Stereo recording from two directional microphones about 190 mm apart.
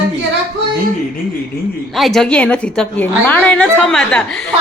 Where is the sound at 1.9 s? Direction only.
Centre (ahead or behind).